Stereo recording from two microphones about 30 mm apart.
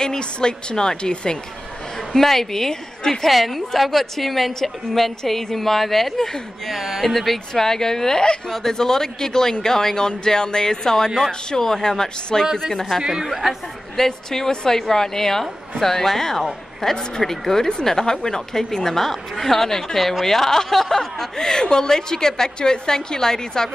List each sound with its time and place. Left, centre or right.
0.0 s speech: left
2.0 s a woman's voice: centre
3.3 s a woman's voice: centre
6.7 s speech: centre
7.0 s a woman's voice: centre
7.5 s a woman's voice: centre
13.3 s a woman's voice: centre
13.9 s a woman's voice: centre